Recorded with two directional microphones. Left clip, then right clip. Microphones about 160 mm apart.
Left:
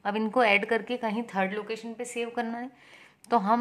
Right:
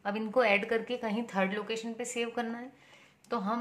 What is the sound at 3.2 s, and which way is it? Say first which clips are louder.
Speech: left 9 dB; 50° left (ahead or behind).